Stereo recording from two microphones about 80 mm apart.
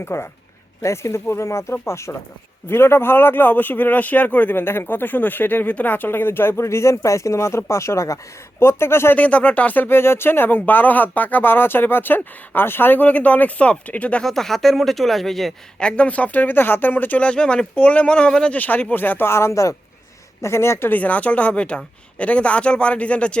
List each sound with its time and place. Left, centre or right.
0.0 s speech: left
9.1 s speech: centre
14.3 s speech: centre
15.8 s speech: centre; by 21.0 s left
21.0 s speech: centre